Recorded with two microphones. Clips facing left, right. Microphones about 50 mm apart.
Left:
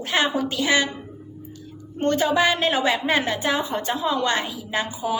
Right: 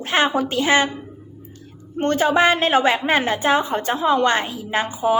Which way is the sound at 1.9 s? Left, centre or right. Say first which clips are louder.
Right 3 dB; right.